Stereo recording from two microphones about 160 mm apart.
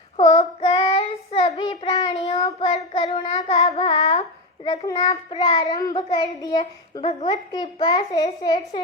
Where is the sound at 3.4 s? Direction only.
40° left (ahead or behind).